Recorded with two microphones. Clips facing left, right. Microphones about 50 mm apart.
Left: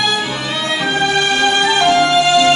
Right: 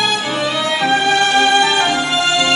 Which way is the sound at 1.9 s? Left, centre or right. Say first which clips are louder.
Left 5 dB; left.